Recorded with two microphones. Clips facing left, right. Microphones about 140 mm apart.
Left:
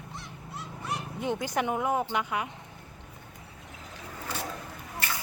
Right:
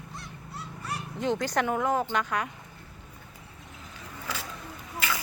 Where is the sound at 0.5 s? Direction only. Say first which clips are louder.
Left 1 dB; 20° left (ahead or behind).